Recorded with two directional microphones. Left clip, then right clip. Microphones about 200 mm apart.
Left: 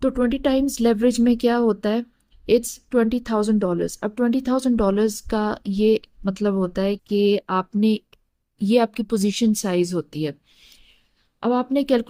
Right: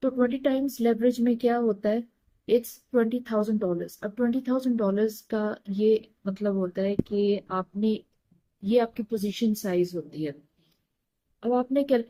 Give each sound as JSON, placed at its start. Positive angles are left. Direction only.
{"t": 0.0, "sound": "a woman's voice", "side_deg": 55}
{"t": 11.3, "sound": "a woman's voice", "side_deg": 55}